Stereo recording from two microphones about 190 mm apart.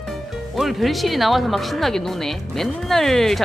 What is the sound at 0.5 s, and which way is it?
Speech, centre (ahead or behind).